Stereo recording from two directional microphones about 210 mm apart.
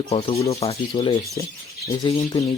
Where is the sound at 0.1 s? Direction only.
25° left (ahead or behind).